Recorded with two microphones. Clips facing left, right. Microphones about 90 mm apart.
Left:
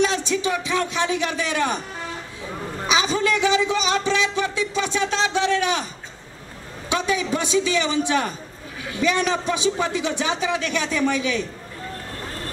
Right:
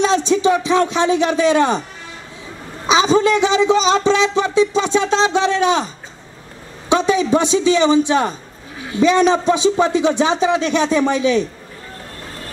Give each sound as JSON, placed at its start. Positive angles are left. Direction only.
{"t": 0.0, "sound": "a man's voice", "side_deg": -25}
{"t": 2.9, "sound": "a man's voice", "side_deg": -25}
{"t": 6.9, "sound": "a man's voice", "side_deg": -25}